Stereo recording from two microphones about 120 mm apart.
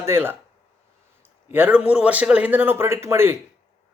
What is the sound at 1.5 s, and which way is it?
A man's voice, 15° right (ahead or behind).